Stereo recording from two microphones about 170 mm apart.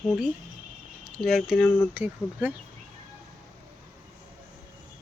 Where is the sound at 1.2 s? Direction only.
Centre (ahead or behind).